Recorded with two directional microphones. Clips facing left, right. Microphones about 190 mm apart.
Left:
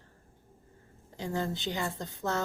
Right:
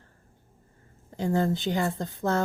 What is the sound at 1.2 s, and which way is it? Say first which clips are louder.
Speech: right 8 dB; 50° right (ahead or behind).